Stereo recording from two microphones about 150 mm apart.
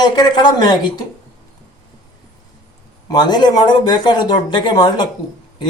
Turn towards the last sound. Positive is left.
turn(degrees=30)  # may be behind; listen again after turning